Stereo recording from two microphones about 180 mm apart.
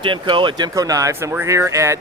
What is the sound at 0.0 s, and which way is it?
Speech, 30° right (ahead or behind).